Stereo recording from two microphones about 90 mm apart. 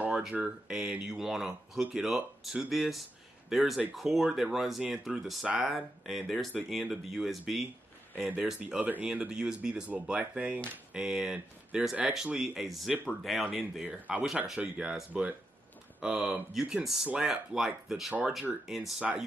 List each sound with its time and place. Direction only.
0.0 s speech: 10° right (ahead or behind)
8.5 s speech: 15° right (ahead or behind)
13.8 s speech: 15° right (ahead or behind)
14.2 s speech: 5° right (ahead or behind)